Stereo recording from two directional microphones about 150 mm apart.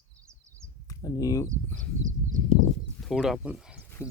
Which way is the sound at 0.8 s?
25° left (ahead or behind).